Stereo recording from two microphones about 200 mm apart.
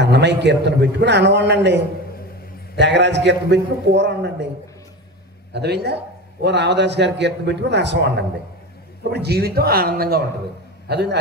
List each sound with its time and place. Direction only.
0.0 s a man's voice: 60° right (ahead or behind)
2.8 s a man's voice: 60° right (ahead or behind)
5.5 s a man's voice: 55° right (ahead or behind)